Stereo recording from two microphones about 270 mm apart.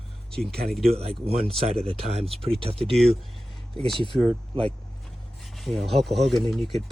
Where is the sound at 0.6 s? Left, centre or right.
Right.